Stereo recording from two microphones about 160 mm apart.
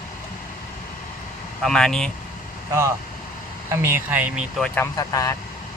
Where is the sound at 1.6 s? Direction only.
5° left (ahead or behind).